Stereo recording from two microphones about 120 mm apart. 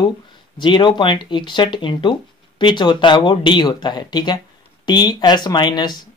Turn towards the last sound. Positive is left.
turn(degrees=35)  # may be behind; listen again after turning